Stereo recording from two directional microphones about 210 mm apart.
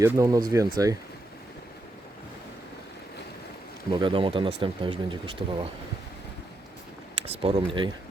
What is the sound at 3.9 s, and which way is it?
Speech, 25° right (ahead or behind).